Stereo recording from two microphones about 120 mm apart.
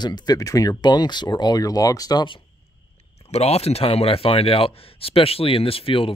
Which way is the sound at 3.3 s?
60° left (ahead or behind).